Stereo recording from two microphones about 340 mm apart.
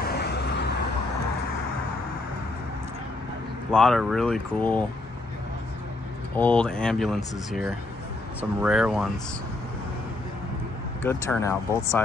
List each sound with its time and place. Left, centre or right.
0.0 s vehicle: left
3.7 s speech: centre
6.3 s speech: centre
8.4 s speech: centre
11.0 s speech: centre